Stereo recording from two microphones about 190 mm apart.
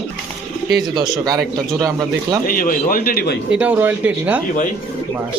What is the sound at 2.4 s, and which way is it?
Speech, 45° left (ahead or behind).